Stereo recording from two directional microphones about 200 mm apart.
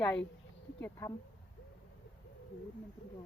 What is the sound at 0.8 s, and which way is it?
Speech, 10° left (ahead or behind).